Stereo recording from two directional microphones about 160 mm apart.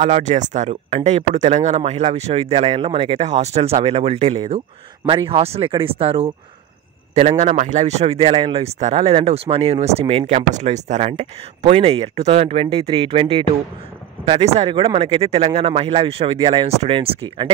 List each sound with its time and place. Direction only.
0.0 s speech: 50° right (ahead or behind)